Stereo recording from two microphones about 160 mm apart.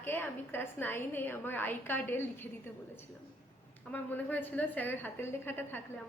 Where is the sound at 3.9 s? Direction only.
10° left (ahead or behind).